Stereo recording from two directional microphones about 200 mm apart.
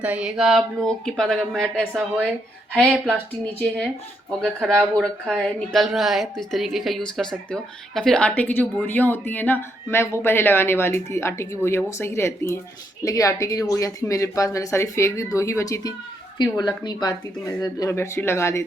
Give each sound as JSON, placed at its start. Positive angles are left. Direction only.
{"t": 0.0, "sound": "speech", "side_deg": -5}
{"t": 4.3, "sound": "speech", "side_deg": 0}